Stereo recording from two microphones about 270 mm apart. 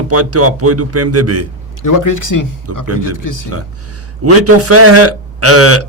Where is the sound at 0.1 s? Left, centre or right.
Right.